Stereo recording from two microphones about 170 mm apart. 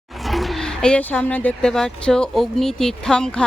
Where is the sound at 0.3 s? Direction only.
Centre (ahead or behind).